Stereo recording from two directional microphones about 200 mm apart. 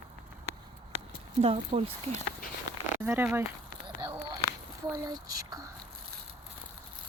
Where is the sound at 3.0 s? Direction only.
10° right (ahead or behind).